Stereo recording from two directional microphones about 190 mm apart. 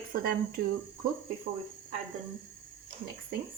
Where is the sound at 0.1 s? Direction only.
50° right (ahead or behind).